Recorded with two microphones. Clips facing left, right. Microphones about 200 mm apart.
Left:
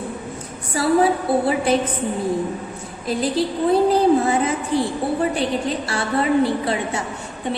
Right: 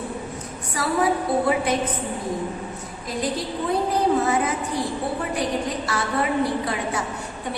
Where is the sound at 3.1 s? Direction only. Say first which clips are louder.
Left 6 dB; 30° left (ahead or behind).